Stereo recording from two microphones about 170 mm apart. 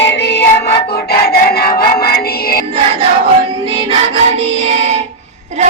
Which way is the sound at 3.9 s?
40° right (ahead or behind).